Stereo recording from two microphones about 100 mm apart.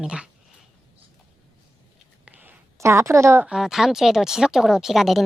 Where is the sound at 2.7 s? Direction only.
30° right (ahead or behind).